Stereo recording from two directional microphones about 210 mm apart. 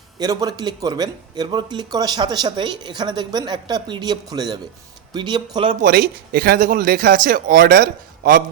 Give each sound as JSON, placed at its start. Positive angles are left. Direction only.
{"t": 0.2, "sound": "speech", "side_deg": -15}
{"t": 5.8, "sound": "speech", "side_deg": -45}